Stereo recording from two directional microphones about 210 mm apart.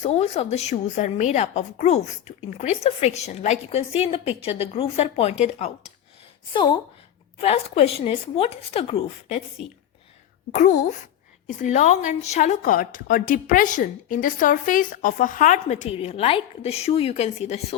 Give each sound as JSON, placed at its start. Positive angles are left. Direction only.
{"t": 0.0, "sound": "a woman's voice", "side_deg": 30}